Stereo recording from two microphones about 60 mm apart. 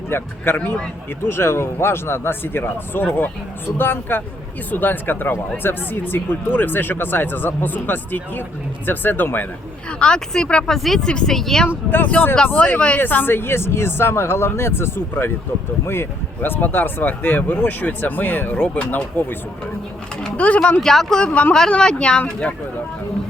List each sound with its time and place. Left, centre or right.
0.1 s speech: left
1.3 s speech: left
10.0 s speech: centre
10.8 s speech: centre
11.0 s speech: centre
12.0 s speech: left
13.0 s speech: left
20.8 s speech: centre